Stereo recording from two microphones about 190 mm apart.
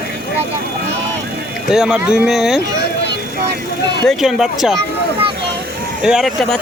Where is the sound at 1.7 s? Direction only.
5° right (ahead or behind).